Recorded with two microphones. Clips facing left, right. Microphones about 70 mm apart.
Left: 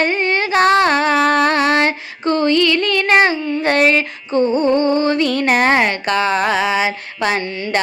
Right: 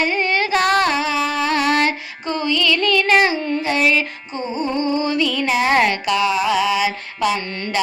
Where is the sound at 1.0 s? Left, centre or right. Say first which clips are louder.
Left 6 dB; left.